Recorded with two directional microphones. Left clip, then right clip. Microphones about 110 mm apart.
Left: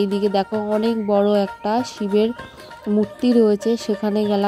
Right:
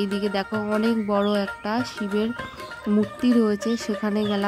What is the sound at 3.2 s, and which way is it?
Speech, 25° left (ahead or behind).